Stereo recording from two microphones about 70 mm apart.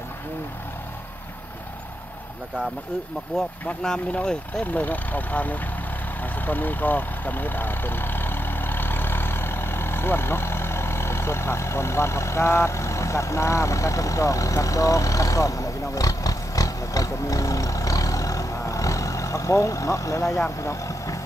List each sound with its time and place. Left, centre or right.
3.6 s speech: centre
4.6 s speech: left